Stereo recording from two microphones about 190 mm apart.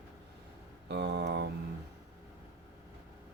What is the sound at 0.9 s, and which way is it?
Speech, 65° right (ahead or behind).